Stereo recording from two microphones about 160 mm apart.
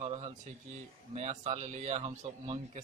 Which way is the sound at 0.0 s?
40° right (ahead or behind).